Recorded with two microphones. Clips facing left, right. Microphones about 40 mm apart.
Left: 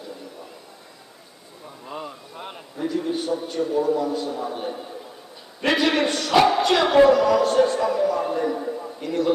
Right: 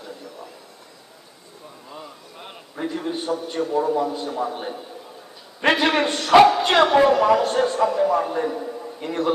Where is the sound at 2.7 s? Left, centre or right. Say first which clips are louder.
Left 2 dB; right.